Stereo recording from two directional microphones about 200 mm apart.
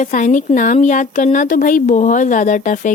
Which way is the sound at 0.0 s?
40° left (ahead or behind).